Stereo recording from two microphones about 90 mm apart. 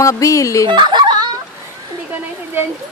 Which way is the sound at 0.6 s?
60° right (ahead or behind).